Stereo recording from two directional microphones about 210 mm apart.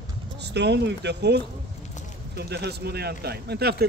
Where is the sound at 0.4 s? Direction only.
55° right (ahead or behind).